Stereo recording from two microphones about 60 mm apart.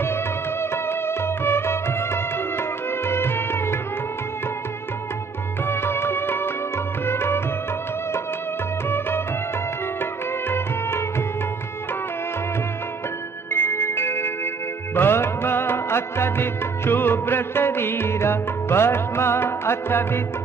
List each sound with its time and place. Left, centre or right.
0.0 s music: left
3.1 s music: left
5.7 s music: left
8.8 s music: left
10.5 s music: left
13.5 s music: left